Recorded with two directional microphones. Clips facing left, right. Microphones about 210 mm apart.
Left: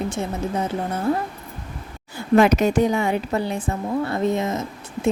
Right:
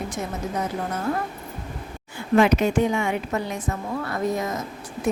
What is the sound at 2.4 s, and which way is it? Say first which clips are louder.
A woman's voice: left 2 dB; 40° left (ahead or behind).